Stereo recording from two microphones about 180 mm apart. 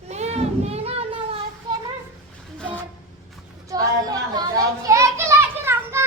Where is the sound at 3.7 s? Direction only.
20° right (ahead or behind).